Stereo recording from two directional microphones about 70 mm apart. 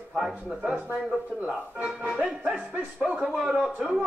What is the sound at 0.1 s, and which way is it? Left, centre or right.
Speech, centre.